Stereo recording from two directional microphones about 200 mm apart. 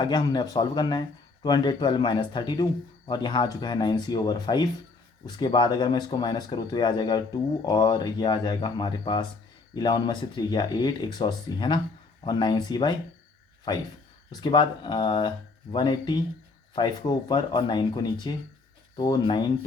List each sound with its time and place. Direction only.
0.0 s speech: 20° left (ahead or behind)